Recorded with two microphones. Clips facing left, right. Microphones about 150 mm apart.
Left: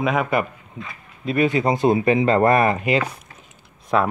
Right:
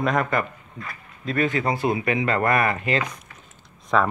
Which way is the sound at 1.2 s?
15° left (ahead or behind).